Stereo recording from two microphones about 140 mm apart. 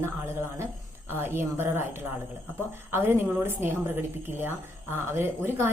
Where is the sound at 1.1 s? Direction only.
15° right (ahead or behind).